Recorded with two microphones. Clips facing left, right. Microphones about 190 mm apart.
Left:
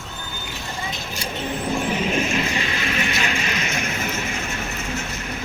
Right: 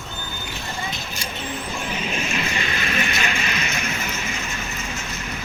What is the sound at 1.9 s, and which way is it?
Train, 45° left (ahead or behind).